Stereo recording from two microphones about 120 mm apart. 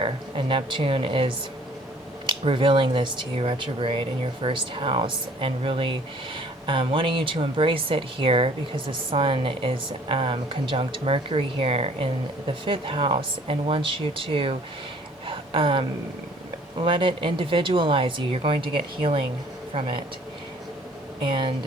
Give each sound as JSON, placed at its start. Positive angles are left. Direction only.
{"t": 0.0, "sound": "speech", "side_deg": -45}
{"t": 15.3, "sound": "a sound", "side_deg": -45}
{"t": 16.7, "sound": "speech", "side_deg": -45}
{"t": 21.2, "sound": "speech", "side_deg": -45}